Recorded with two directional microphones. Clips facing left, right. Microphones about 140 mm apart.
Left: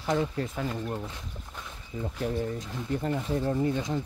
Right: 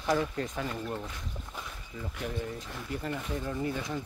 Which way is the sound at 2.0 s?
30° left (ahead or behind).